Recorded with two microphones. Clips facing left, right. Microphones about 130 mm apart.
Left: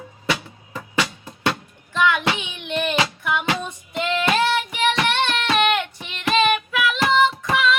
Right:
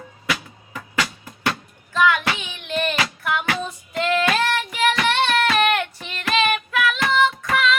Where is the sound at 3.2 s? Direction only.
Centre (ahead or behind).